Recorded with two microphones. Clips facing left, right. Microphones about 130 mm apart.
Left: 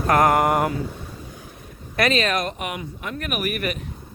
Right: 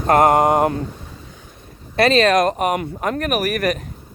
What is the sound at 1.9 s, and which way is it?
Speech, 30° right (ahead or behind).